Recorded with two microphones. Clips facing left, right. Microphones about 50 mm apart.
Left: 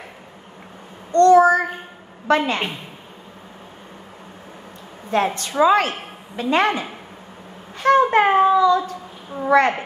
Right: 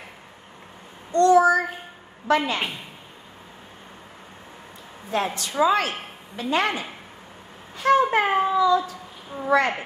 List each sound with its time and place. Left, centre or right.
1.1 s child singing: left
2.2 s a woman's voice: left
5.1 s a woman's voice: left
7.7 s a sound: left
9.5 s a woman's voice: left